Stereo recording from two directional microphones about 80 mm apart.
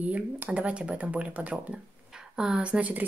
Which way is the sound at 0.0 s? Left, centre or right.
Centre.